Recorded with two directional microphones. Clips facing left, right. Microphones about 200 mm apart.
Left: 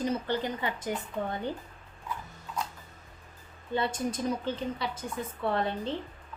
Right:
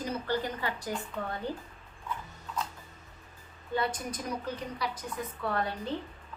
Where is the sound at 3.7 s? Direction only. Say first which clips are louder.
Left 2 dB; 25° left (ahead or behind).